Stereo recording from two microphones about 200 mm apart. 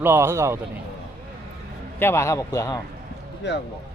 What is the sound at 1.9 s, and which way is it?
Speech, 10° left (ahead or behind).